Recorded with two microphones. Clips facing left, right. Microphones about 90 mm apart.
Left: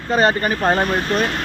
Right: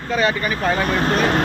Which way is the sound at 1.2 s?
75° right (ahead or behind).